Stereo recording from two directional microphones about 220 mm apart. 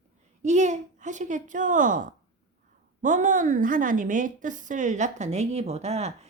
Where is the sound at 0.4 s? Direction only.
30° right (ahead or behind).